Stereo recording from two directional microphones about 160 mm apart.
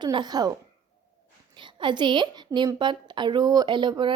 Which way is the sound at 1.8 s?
30° right (ahead or behind).